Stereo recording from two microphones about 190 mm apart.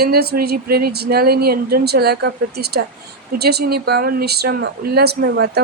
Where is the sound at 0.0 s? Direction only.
55° right (ahead or behind).